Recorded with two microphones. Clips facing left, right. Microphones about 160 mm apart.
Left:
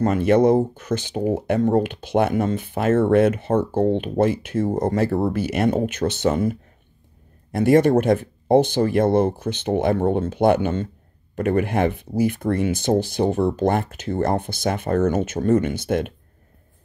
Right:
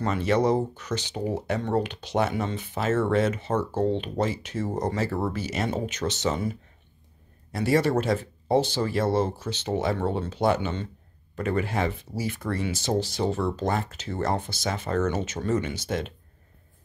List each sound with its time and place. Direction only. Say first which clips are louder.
0.0 s speech: left 7 dB; 50° left (ahead or behind)